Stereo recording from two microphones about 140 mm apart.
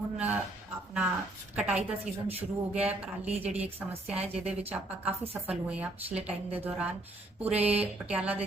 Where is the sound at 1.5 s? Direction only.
10° right (ahead or behind).